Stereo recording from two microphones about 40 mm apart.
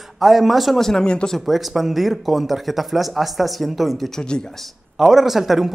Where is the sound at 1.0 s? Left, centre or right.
Left.